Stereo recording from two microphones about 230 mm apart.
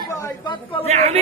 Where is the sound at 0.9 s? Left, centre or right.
Right.